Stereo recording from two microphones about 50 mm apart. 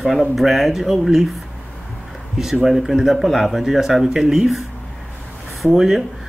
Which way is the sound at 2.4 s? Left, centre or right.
Centre.